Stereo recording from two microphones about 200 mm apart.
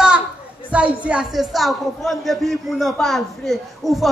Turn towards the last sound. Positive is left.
turn(degrees=0)  # may be behind; listen again after turning